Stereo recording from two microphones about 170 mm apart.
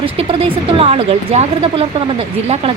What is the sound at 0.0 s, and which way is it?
Speech, 35° right (ahead or behind).